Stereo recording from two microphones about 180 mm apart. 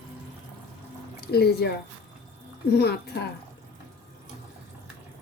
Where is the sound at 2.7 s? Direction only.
65° left (ahead or behind).